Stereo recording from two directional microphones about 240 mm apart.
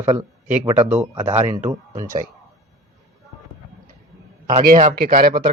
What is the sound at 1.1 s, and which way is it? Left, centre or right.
Speech, right.